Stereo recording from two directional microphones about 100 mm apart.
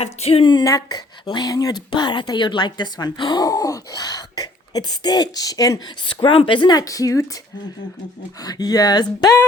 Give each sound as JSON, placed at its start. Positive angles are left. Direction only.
{"t": 0.2, "sound": "speech", "side_deg": 75}
{"t": 0.6, "sound": "speech", "side_deg": 40}
{"t": 6.1, "sound": "speech", "side_deg": 55}
{"t": 8.4, "sound": "speech", "side_deg": 40}